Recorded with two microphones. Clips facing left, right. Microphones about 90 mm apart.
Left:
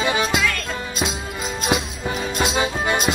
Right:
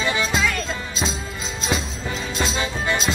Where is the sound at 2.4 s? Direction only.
15° left (ahead or behind).